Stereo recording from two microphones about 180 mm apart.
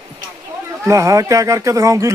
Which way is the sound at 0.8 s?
15° right (ahead or behind).